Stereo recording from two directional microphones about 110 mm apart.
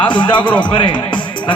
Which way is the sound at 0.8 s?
45° left (ahead or behind).